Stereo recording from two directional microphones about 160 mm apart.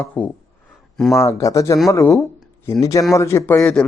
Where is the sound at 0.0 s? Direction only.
10° left (ahead or behind).